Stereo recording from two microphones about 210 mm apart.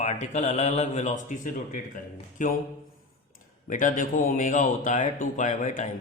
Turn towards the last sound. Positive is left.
turn(degrees=35)  # may be behind; listen again after turning